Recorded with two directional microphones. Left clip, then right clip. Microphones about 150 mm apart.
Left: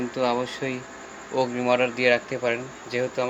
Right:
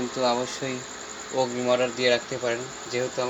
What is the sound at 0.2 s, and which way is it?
Speech, 5° left (ahead or behind).